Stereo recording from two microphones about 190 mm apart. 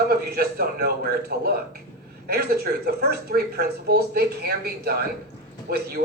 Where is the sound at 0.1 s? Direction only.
55° right (ahead or behind).